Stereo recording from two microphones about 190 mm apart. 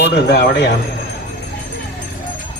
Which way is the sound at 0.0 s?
65° left (ahead or behind).